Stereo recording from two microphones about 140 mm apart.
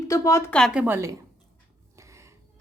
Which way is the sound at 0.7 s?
10° right (ahead or behind).